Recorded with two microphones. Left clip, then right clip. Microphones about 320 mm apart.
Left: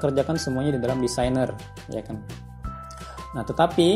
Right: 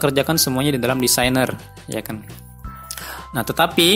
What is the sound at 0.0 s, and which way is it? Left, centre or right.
Speech, right.